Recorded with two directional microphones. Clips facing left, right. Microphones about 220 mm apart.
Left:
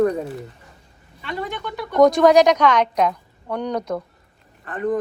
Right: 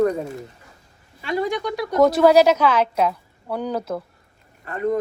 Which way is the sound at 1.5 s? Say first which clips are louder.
Right 5 dB; 40° right (ahead or behind).